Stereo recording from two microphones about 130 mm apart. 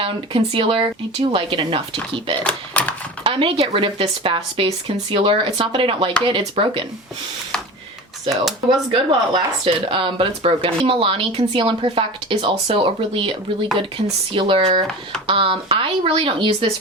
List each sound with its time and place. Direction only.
0.0 s speech: 45° right (ahead or behind)
2.4 s speech: 10° left (ahead or behind)
3.2 s speech: 45° right (ahead or behind)
8.9 s speech: 45° right (ahead or behind)